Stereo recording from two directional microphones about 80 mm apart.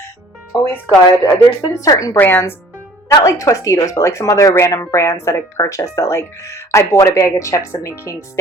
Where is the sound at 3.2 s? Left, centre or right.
Left.